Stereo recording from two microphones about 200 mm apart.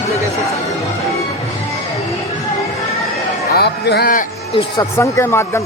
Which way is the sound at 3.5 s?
55° left (ahead or behind).